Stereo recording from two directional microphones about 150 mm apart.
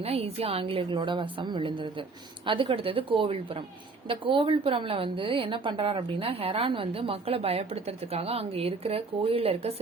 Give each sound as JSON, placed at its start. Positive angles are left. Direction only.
{"t": 0.0, "sound": "a woman's voice", "side_deg": -45}